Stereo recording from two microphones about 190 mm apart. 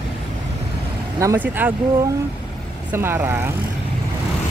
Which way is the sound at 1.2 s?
15° right (ahead or behind).